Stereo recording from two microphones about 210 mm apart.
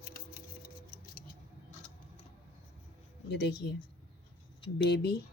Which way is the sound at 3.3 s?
55° left (ahead or behind).